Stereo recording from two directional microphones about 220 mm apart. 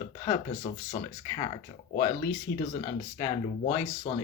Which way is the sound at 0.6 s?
30° left (ahead or behind).